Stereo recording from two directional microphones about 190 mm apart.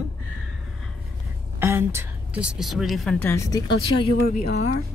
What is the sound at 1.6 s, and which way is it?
Speech, 15° right (ahead or behind).